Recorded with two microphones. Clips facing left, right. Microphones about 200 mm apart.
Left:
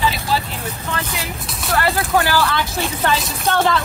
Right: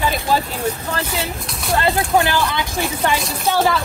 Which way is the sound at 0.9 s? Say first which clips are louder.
Right 2 dB; 35° right (ahead or behind).